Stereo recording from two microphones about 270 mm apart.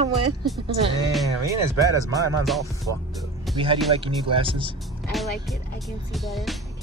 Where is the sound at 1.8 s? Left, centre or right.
Centre.